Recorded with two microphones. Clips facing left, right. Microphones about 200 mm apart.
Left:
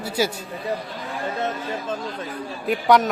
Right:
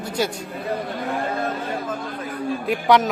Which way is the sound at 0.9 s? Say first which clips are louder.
Right 6 dB; 55° right (ahead or behind).